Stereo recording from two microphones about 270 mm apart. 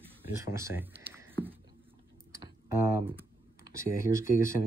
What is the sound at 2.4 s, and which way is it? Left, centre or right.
Typing, centre.